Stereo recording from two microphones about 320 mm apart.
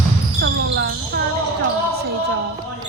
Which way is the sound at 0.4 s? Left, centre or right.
Right.